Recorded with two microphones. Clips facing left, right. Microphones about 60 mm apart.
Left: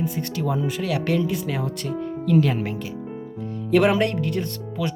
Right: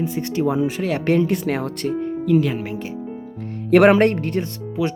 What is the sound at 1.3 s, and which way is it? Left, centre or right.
Speech, right.